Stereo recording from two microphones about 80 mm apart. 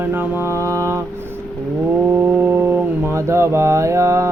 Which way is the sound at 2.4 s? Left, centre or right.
Right.